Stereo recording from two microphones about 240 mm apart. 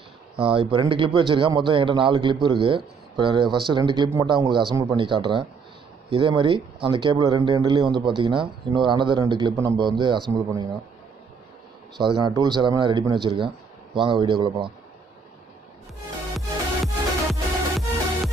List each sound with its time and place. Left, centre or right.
0.4 s speech: right
12.0 s speech: centre
16.3 s music: centre